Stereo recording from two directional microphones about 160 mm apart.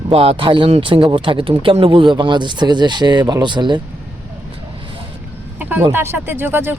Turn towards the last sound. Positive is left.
turn(degrees=-15)  # may be behind; listen again after turning